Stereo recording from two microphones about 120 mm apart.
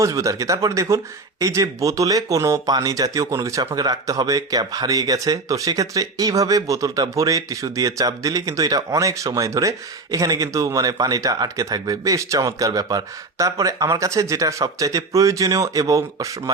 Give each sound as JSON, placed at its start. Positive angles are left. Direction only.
{"t": 0.0, "sound": "speech", "side_deg": -25}